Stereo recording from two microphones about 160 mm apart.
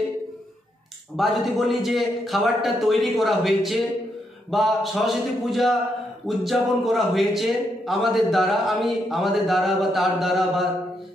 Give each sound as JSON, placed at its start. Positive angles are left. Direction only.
{"t": 1.1, "sound": "speech", "side_deg": 0}